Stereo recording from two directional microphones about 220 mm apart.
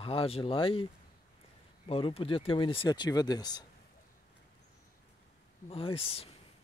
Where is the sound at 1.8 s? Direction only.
25° left (ahead or behind).